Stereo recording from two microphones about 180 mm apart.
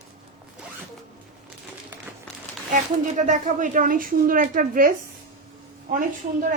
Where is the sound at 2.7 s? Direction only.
45° right (ahead or behind).